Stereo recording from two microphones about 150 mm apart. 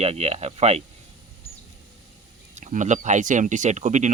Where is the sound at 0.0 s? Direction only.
45° right (ahead or behind).